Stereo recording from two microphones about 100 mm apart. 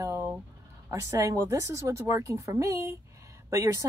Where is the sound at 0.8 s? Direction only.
30° right (ahead or behind).